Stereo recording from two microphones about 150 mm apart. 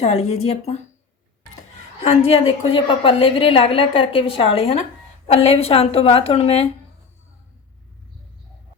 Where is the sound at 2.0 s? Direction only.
40° left (ahead or behind).